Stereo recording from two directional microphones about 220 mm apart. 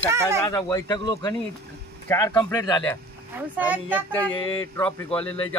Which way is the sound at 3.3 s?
5° right (ahead or behind).